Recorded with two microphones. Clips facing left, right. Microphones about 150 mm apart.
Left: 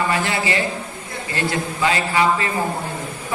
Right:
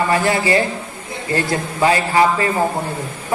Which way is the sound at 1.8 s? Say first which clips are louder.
Right 4 dB; 35° right (ahead or behind).